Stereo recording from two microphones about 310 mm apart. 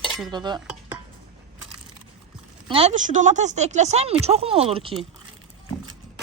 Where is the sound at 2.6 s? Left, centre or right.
Centre.